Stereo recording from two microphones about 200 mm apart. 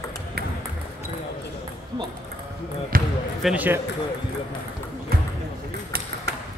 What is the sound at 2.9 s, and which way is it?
Speech, 45° right (ahead or behind).